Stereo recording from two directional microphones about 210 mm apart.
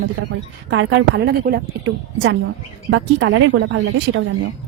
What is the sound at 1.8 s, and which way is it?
Speech, 60° right (ahead or behind).